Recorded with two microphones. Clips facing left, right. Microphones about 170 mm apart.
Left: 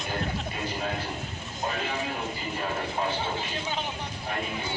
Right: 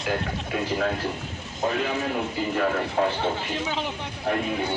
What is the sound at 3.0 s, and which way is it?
Speech, 90° right.